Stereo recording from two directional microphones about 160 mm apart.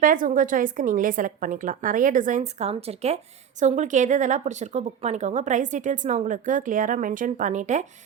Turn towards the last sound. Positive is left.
turn(degrees=-50)  # may be behind; listen again after turning